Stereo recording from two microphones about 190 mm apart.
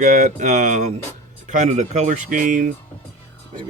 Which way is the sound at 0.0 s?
40° right (ahead or behind).